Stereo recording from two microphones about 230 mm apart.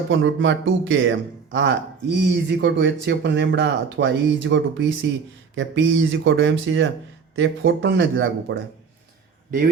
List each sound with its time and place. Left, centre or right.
0.1 s a man's voice: right